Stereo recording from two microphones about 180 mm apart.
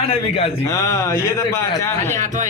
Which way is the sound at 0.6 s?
15° left (ahead or behind).